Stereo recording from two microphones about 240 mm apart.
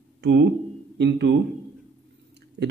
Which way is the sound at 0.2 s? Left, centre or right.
Right.